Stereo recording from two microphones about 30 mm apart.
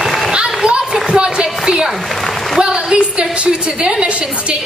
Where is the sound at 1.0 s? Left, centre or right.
Right.